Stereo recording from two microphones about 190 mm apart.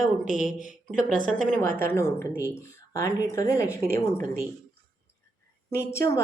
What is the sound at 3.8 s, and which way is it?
Speech, 45° right (ahead or behind).